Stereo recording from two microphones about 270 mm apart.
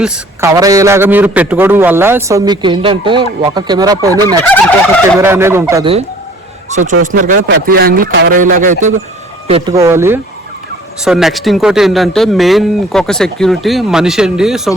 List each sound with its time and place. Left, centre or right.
0.0 s a man's voice: centre
6.7 s a man's voice: right
9.5 s a man's voice: centre